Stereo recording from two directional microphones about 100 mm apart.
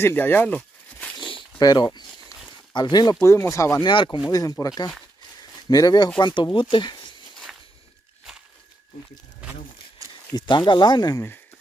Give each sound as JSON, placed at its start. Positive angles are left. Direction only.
{"t": 0.0, "sound": "speech", "side_deg": 20}
{"t": 1.1, "sound": "a sound", "side_deg": 55}
{"t": 1.6, "sound": "speech", "side_deg": 40}
{"t": 3.3, "sound": "speech", "side_deg": 30}
{"t": 3.8, "sound": "speech", "side_deg": 55}
{"t": 4.3, "sound": "speech", "side_deg": 35}
{"t": 10.0, "sound": "a sound", "side_deg": -35}
{"t": 10.3, "sound": "speech", "side_deg": 50}